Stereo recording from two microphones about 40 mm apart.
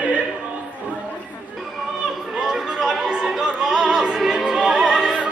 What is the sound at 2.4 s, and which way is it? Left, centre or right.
Opera, centre.